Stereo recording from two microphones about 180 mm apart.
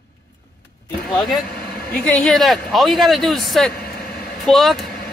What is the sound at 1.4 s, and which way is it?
Vehicle, 55° left (ahead or behind).